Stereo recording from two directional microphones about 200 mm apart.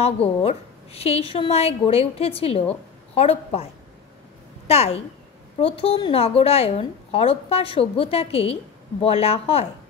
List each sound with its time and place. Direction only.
0.0 s a woman's voice: 30° left (ahead or behind)
4.6 s a woman's voice: 30° left (ahead or behind)